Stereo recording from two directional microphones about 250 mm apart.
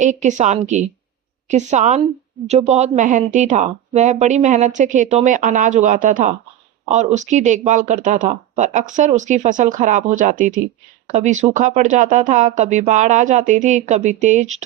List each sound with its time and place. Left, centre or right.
0.0 s a woman's voice: right